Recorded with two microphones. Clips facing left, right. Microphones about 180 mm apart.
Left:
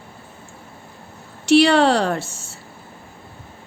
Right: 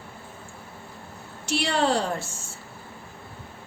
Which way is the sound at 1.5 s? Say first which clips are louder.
Left 10 dB; 75° left (ahead or behind).